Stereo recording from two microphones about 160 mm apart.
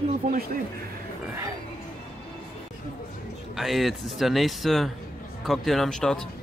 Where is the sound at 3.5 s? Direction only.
Centre (ahead or behind).